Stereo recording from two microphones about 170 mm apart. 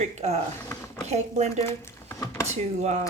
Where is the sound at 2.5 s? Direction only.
40° right (ahead or behind).